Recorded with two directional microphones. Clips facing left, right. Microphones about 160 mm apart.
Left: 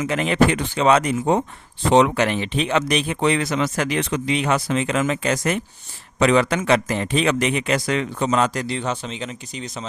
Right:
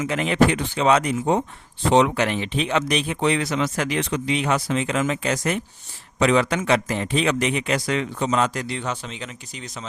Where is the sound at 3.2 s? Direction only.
50° left (ahead or behind).